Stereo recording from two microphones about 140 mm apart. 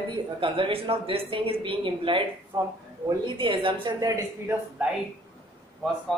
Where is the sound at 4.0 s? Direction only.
25° right (ahead or behind).